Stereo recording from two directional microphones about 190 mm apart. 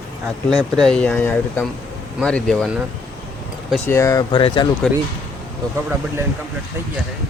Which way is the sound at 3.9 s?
15° left (ahead or behind).